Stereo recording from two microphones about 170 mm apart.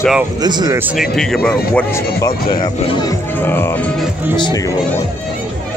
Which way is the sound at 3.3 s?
10° left (ahead or behind).